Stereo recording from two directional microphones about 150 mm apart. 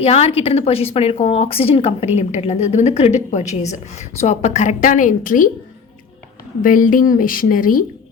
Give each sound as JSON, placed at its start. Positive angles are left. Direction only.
{"t": 0.0, "sound": "a woman's voice", "side_deg": 45}
{"t": 6.6, "sound": "a woman's voice", "side_deg": 65}